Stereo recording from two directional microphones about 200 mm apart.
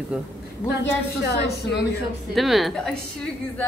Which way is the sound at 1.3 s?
55° left (ahead or behind).